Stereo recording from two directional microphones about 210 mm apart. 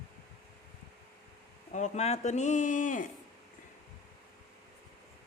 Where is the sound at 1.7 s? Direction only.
35° left (ahead or behind).